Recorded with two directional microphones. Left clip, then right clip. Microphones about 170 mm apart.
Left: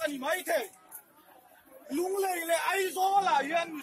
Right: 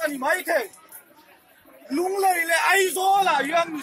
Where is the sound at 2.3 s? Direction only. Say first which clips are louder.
Right 8 dB; 40° right (ahead or behind).